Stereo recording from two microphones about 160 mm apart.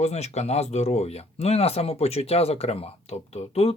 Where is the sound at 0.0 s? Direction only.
45° left (ahead or behind).